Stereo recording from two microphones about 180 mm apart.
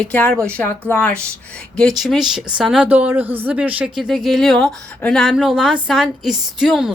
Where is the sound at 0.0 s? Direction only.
5° left (ahead or behind).